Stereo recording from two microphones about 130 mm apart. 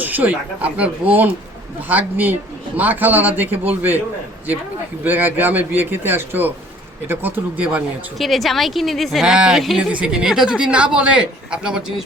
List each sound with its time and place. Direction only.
0.0 s speech: 15° right (ahead or behind)
5.0 s speech: 15° right (ahead or behind)